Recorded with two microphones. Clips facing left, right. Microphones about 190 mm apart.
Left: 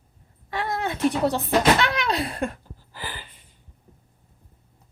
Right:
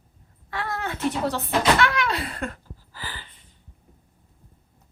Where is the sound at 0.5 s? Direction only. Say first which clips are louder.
Left 3 dB; 20° left (ahead or behind).